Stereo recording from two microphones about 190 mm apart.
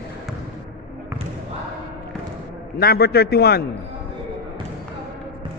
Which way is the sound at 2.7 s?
55° left (ahead or behind).